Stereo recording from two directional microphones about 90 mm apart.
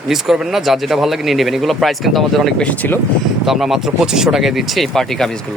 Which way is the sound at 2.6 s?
15° left (ahead or behind).